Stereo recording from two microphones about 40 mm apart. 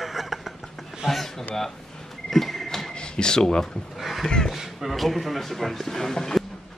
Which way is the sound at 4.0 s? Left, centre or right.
Centre.